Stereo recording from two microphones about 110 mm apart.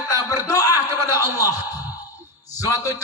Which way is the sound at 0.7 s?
20° right (ahead or behind).